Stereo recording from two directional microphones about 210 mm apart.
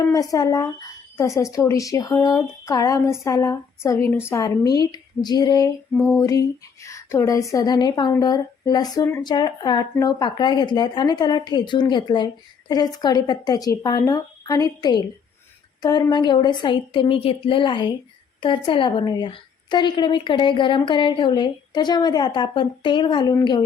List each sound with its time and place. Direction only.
0.1 s a woman's voice: 15° left (ahead or behind)